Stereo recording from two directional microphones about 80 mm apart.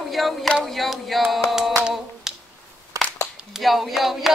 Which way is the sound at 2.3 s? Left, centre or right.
Centre.